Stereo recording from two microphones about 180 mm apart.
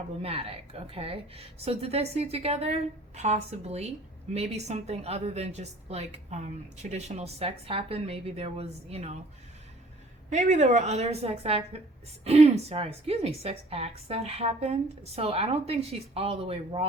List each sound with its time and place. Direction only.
0.2 s a woman's voice: 35° right (ahead or behind)
10.2 s a woman's voice: 40° right (ahead or behind)